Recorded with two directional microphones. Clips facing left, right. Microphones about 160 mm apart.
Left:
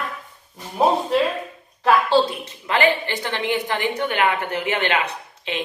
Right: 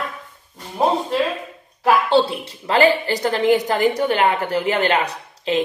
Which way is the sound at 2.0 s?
20° right (ahead or behind).